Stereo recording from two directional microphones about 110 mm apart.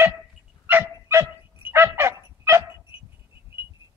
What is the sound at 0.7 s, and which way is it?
Dog, 20° right (ahead or behind).